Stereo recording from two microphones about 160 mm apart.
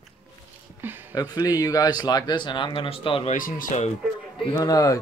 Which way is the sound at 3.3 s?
60° left (ahead or behind).